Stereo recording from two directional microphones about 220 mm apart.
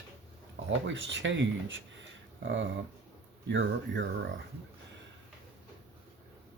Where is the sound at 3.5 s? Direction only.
55° right (ahead or behind).